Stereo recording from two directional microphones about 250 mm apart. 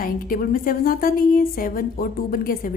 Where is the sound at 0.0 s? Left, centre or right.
Left.